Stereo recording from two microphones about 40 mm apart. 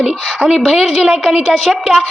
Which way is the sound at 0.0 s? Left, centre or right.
Centre.